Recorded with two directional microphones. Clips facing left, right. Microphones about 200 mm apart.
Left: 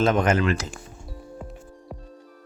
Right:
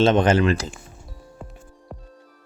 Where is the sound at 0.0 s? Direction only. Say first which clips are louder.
Right 4 dB; 30° right (ahead or behind).